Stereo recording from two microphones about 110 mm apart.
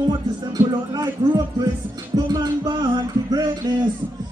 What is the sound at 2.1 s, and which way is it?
Speech, 40° right (ahead or behind).